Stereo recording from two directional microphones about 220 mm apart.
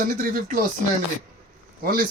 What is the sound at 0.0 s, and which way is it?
Speech, 40° right (ahead or behind).